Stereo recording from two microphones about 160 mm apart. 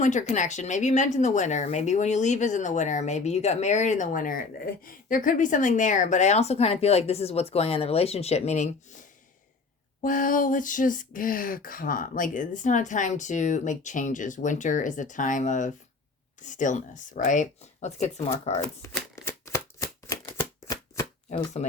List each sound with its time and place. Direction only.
0.0 s speech: 50° left (ahead or behind)
10.0 s speech: 55° left (ahead or behind)
18.8 s shuffling cards: 15° left (ahead or behind)